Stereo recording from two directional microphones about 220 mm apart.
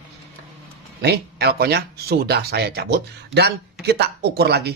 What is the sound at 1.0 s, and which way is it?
Speech, 45° right (ahead or behind).